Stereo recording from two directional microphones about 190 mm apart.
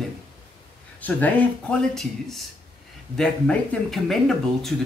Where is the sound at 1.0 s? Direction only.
10° left (ahead or behind).